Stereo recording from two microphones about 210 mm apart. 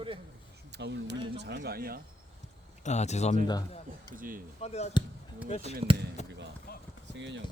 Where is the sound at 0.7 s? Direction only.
55° right (ahead or behind).